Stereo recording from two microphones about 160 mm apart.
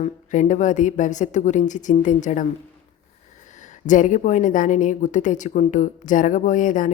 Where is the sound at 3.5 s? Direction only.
50° left (ahead or behind).